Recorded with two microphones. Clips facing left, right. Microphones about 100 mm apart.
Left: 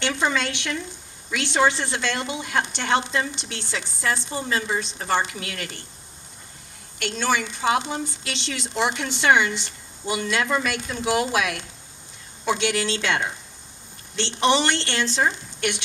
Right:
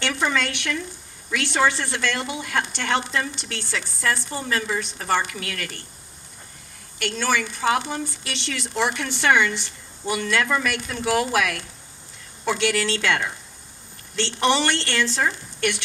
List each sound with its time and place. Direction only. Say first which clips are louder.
0.0 s a woman's voice: even; 20° left (ahead or behind)
7.0 s a woman's voice: even; 20° left (ahead or behind)
14.4 s a woman's voice: left 1 dB; 20° left (ahead or behind)